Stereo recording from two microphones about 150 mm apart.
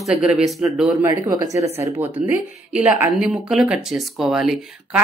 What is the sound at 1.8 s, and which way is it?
Speech, 10° right (ahead or behind).